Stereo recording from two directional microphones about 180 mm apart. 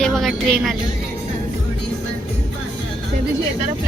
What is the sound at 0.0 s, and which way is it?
Speech, centre (ahead or behind).